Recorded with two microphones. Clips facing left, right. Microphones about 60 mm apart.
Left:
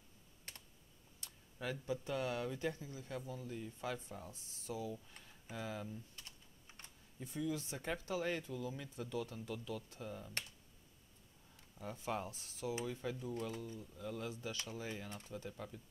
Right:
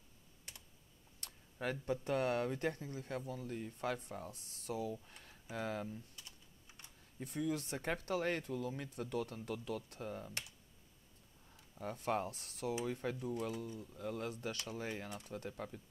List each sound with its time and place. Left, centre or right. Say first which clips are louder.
1.2 s speech: right 3 dB; right
5.2 s a sound: right 5 dB; right
6.1 s typing: even; left
7.2 s speech: right 2 dB; right
11.8 s speech: right 4 dB; right
12.8 s speech: right 3 dB; right
15.2 s speech: right 2 dB; right